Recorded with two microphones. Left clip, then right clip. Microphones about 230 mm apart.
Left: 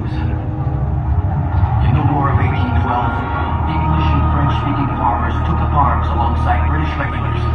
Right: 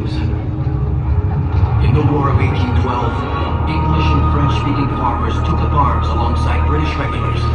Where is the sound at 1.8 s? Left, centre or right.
Centre.